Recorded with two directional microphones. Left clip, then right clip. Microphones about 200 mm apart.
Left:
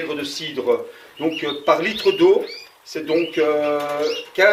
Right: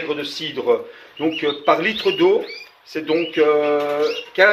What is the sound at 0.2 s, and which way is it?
Speech, 20° right (ahead or behind).